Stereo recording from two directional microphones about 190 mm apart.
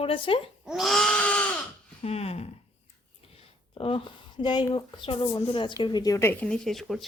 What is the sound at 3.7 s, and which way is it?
Speech, 25° left (ahead or behind).